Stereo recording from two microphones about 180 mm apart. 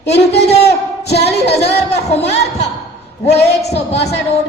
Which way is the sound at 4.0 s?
70° left (ahead or behind).